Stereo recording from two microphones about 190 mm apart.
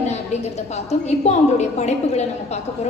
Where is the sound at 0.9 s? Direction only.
35° left (ahead or behind).